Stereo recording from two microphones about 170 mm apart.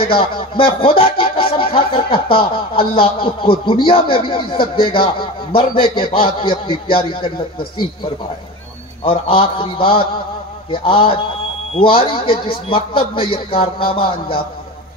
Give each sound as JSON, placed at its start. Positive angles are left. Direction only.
{"t": 0.0, "sound": "speech", "side_deg": 30}